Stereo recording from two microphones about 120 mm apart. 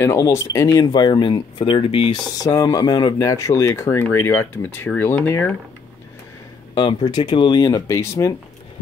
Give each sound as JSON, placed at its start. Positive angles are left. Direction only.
{"t": 0.0, "sound": "speech", "side_deg": 25}
{"t": 2.2, "sound": "speech", "side_deg": 30}
{"t": 6.7, "sound": "speech", "side_deg": 35}